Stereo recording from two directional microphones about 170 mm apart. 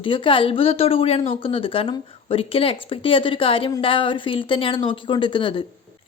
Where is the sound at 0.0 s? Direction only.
30° left (ahead or behind).